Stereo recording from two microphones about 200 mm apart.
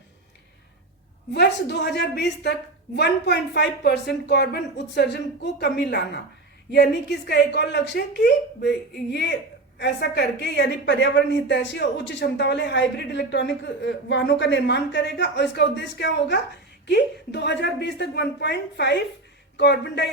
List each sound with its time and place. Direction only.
1.3 s a woman's voice: 55° left (ahead or behind)
9.7 s a woman's voice: 55° left (ahead or behind)